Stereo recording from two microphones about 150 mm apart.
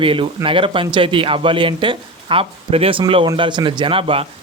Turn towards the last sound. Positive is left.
turn(degrees=-40)  # may be behind; listen again after turning